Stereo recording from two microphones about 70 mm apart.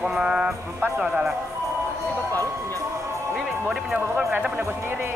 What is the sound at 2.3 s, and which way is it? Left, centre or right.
Speech, left.